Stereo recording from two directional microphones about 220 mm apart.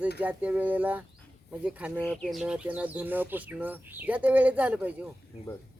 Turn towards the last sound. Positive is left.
turn(degrees=-5)  # may be behind; listen again after turning